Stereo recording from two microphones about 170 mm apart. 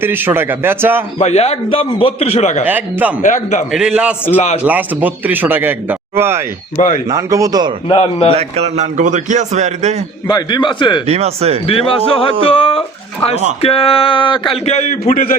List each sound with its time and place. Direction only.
0.0 s speech: 10° right (ahead or behind)
1.2 s speech: 40° left (ahead or behind)
2.6 s speech: 10° right (ahead or behind)
3.2 s a man's voice: 45° left (ahead or behind)
3.7 s a man's voice: 5° right (ahead or behind)
4.4 s speech: 40° left (ahead or behind)
4.6 s speech: 10° right (ahead or behind)
6.7 s a man's voice: 45° left (ahead or behind)
7.1 s a man's voice: 20° right (ahead or behind)
7.9 s speech: 30° left (ahead or behind)
8.3 s a man's voice: 40° right (ahead or behind)
10.2 s a man's voice: 25° left (ahead or behind)
11.0 s speech: 35° right (ahead or behind)
11.6 s speech: 35° left (ahead or behind); by 15.4 s 50° left (ahead or behind)